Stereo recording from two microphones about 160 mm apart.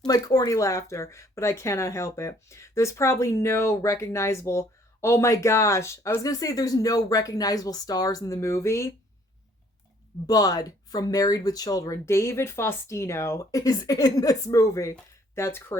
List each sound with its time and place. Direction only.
0.0 s speech: 25° left (ahead or behind)
10.2 s speech: 25° left (ahead or behind)